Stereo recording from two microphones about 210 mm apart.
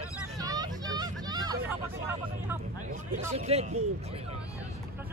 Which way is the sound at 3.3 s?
30° right (ahead or behind).